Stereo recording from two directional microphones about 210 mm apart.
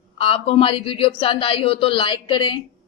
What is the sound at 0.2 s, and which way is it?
Speech, 25° left (ahead or behind).